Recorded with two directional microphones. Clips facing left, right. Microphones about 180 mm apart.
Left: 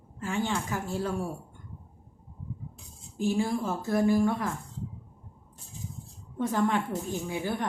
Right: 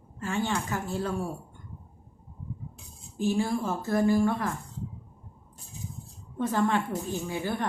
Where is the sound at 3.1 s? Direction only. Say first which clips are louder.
Right 1 dB; 15° left (ahead or behind).